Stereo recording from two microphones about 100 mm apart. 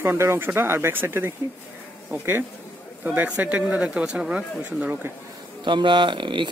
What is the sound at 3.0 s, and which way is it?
Speech, 15° right (ahead or behind).